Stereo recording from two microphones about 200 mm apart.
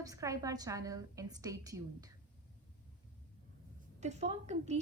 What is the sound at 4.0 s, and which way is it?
Speech, 35° right (ahead or behind).